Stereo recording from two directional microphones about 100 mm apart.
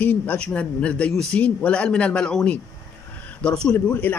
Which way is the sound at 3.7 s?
20° left (ahead or behind).